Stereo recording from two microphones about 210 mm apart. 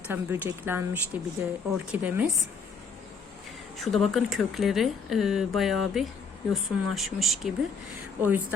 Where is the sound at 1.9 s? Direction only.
10° right (ahead or behind).